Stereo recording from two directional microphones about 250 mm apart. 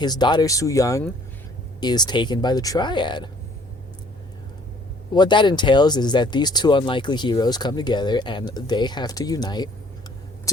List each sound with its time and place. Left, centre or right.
0.0 s speech: centre
5.1 s speech: centre